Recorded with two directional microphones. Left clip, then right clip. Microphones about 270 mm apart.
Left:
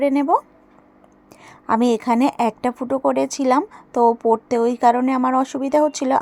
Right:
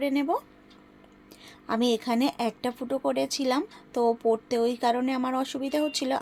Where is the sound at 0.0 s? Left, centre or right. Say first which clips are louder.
Left 10 dB; left.